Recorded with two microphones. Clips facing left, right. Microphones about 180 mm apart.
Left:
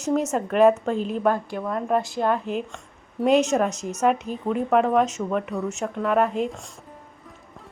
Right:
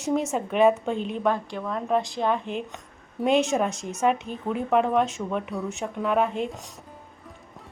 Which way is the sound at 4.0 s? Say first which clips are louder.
Left 2 dB; centre (ahead or behind).